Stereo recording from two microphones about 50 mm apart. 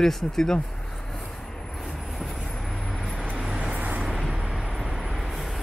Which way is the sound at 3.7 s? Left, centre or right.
Right.